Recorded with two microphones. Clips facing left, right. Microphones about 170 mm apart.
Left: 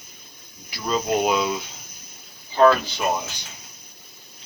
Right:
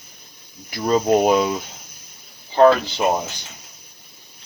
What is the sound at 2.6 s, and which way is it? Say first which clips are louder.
Speech: right 3 dB; 25° right (ahead or behind).